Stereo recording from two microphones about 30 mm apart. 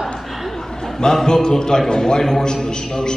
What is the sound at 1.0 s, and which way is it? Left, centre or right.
A man's voice, centre.